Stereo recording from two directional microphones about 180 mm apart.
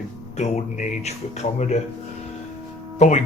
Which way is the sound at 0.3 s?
40° left (ahead or behind).